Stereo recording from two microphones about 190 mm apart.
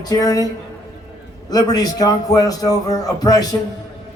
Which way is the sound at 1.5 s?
20° left (ahead or behind).